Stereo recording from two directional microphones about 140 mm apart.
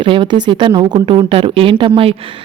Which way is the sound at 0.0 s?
35° right (ahead or behind).